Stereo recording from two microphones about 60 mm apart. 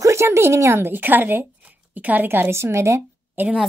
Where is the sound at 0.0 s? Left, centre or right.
Right.